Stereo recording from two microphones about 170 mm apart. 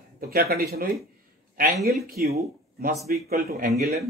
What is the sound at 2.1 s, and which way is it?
Speech, 65° right (ahead or behind).